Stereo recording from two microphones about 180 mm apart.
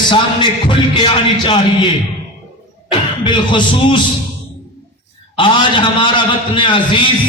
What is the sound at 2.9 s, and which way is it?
A man's voice, 25° left (ahead or behind).